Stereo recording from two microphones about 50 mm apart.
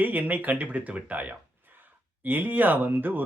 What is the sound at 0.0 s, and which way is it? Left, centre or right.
A man's voice, right.